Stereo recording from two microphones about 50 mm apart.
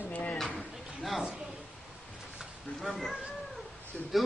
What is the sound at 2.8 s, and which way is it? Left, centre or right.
Speech, centre.